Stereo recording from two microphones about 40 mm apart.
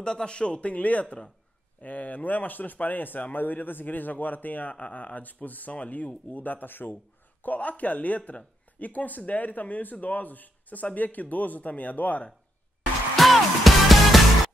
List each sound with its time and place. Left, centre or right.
0.0 s a man's voice: left
4.7 s speech: left
7.4 s speech: left
13.1 s music: centre